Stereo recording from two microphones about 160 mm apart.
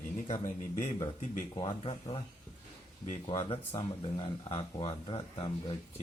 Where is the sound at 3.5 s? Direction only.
35° left (ahead or behind).